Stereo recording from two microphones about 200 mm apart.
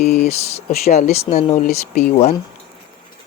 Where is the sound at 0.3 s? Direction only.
30° left (ahead or behind).